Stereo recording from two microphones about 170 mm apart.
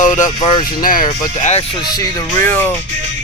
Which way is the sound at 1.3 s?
40° left (ahead or behind).